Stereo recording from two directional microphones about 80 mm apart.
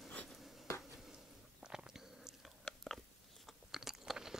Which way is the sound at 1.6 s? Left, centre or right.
Centre.